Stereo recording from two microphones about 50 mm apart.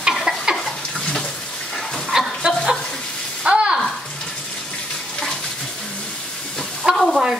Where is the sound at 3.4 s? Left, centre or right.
Centre.